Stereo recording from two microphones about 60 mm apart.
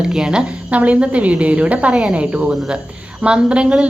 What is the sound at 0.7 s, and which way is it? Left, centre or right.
A woman's voice, right.